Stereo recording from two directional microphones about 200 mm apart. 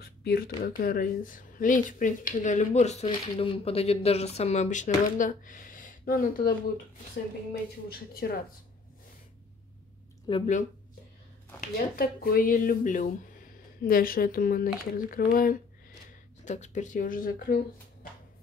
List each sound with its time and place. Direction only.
0.0 s a sound: 50° left (ahead or behind)
0.7 s speech: 45° left (ahead or behind)
7.9 s speech: 50° left (ahead or behind)
10.2 s speech: 25° left (ahead or behind)
11.6 s speech: 45° left (ahead or behind)